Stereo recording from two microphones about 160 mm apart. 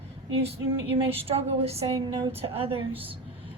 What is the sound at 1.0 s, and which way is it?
A woman's voice, 35° right (ahead or behind).